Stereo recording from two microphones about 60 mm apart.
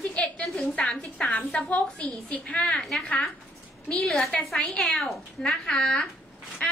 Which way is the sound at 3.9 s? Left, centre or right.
Centre.